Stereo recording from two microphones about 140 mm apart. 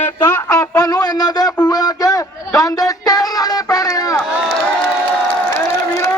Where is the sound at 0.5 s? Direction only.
25° left (ahead or behind).